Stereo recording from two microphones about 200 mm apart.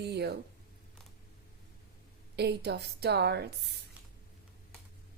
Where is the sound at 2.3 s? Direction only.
55° right (ahead or behind).